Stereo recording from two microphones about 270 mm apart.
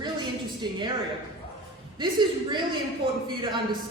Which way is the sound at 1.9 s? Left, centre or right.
Centre.